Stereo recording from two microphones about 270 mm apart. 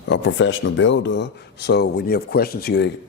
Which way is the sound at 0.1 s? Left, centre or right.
Left.